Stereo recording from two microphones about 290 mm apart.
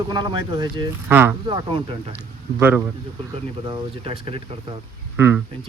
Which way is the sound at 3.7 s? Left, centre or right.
Centre.